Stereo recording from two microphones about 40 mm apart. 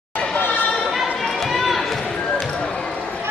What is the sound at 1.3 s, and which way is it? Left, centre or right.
Run, centre.